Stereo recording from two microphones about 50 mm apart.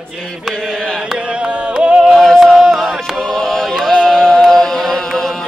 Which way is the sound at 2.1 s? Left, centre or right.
Centre.